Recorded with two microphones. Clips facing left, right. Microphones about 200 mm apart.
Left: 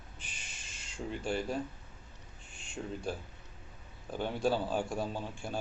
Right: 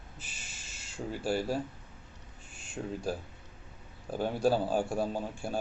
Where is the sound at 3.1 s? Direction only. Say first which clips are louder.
Right 3 dB; 40° right (ahead or behind).